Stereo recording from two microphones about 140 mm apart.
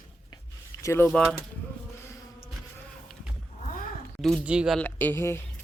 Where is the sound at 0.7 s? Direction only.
20° left (ahead or behind).